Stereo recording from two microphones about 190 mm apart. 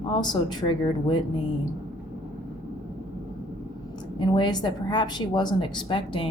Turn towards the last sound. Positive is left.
turn(degrees=25)  # may be behind; listen again after turning